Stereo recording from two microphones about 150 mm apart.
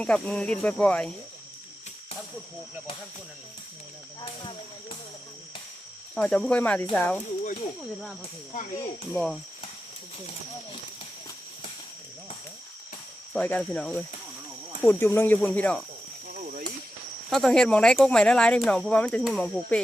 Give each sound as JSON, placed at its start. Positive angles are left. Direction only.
{"t": 0.0, "sound": "speech", "side_deg": 5}
{"t": 6.1, "sound": "speech", "side_deg": 5}
{"t": 9.1, "sound": "speech", "side_deg": 0}
{"t": 13.3, "sound": "speech", "side_deg": 10}
{"t": 16.4, "sound": "a sound", "side_deg": -60}
{"t": 17.2, "sound": "speech", "side_deg": 0}